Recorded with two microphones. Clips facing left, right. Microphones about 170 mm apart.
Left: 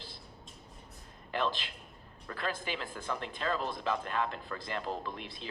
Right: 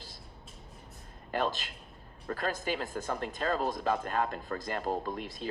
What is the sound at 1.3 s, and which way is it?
Speech, 45° right (ahead or behind).